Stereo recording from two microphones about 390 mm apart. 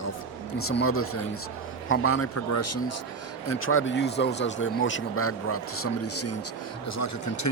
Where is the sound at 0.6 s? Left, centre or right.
Left.